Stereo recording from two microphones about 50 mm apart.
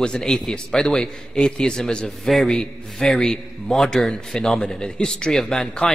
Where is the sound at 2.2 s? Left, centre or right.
Centre.